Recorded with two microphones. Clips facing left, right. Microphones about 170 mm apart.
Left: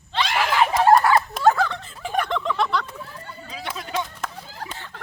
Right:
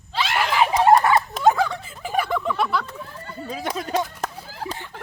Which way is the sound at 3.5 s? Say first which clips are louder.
Right 5 dB; 45° right (ahead or behind).